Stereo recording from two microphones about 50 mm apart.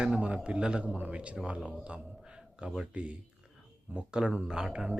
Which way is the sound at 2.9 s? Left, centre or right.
Right.